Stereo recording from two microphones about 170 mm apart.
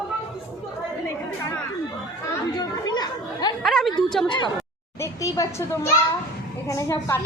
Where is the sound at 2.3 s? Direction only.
25° left (ahead or behind).